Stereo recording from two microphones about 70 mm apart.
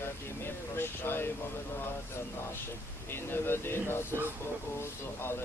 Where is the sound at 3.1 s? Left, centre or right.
Left.